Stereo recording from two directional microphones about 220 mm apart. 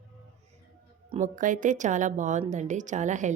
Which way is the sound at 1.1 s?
35° right (ahead or behind).